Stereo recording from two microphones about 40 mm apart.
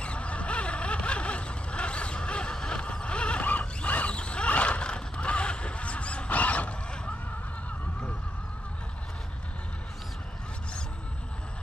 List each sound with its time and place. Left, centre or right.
0.0 s a sound: left
3.4 s zipper: left
4.5 s honk: left